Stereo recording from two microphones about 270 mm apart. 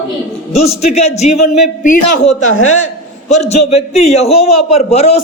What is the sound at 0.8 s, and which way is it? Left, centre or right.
Speech, left.